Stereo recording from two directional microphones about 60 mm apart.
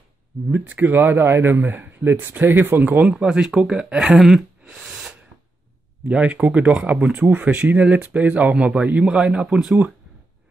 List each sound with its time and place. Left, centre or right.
0.5 s speech: right
3.1 s speech: centre
4.7 s sneeze: centre
6.0 s speech: right
9.0 s speech: centre